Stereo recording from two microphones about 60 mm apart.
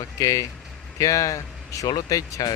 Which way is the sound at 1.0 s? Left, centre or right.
Left.